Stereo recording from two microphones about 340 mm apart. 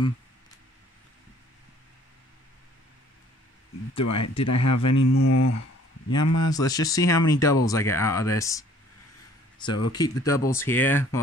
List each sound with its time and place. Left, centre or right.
4.0 s speech: left
4.9 s speech: left
6.5 s speech: centre
9.9 s speech: centre